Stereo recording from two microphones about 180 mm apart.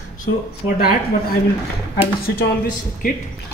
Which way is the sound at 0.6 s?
55° left (ahead or behind).